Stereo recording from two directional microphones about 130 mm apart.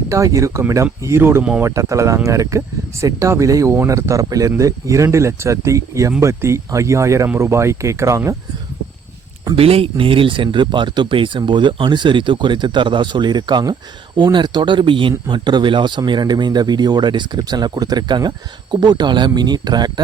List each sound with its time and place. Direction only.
0.1 s speech: 25° right (ahead or behind)
9.6 s speech: 50° right (ahead or behind); by 19.9 s 30° right (ahead or behind)